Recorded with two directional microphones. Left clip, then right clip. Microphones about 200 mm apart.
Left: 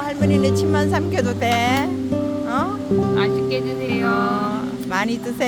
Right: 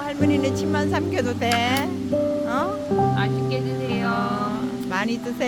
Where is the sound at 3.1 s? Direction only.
30° left (ahead or behind).